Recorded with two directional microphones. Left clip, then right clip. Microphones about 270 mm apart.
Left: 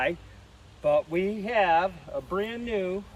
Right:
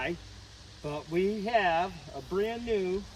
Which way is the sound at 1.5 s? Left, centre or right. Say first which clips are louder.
Left 3 dB; right.